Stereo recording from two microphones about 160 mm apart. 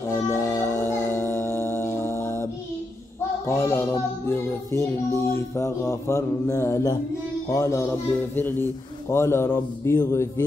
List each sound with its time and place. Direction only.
0.1 s music: 15° left (ahead or behind)
3.4 s mantra: 15° left (ahead or behind)
7.4 s speech: 20° left (ahead or behind)
8.4 s mantra: 10° left (ahead or behind)